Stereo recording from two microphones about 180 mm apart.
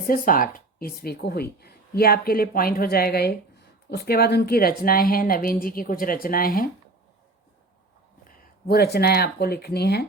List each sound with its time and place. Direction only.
0.1 s speech: 50° left (ahead or behind)
8.6 s speech: 60° left (ahead or behind)